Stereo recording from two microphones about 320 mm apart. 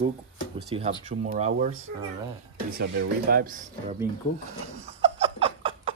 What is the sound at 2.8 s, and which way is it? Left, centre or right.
Speech, right.